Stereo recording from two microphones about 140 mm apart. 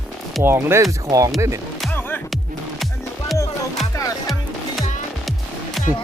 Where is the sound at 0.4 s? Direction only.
15° right (ahead or behind).